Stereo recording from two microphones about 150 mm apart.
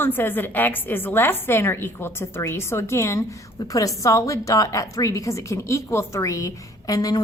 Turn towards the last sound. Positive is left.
turn(degrees=25)  # may be behind; listen again after turning